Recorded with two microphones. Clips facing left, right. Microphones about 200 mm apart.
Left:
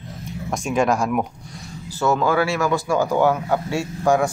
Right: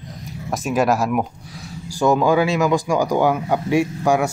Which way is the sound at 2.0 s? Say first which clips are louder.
Right 3 dB; 15° right (ahead or behind).